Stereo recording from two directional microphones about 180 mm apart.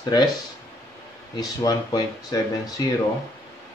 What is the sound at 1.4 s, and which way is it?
Speech, 20° left (ahead or behind).